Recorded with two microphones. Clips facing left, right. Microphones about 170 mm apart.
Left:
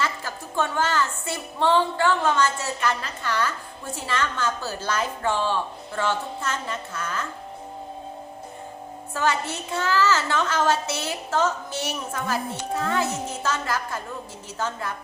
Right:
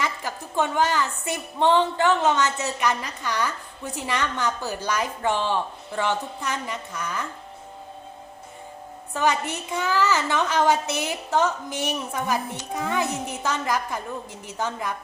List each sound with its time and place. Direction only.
0.0 s a woman's voice: 15° right (ahead or behind)
9.1 s a woman's voice: 15° right (ahead or behind)